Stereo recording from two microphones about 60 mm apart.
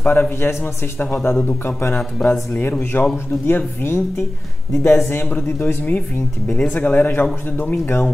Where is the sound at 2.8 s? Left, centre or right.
Left.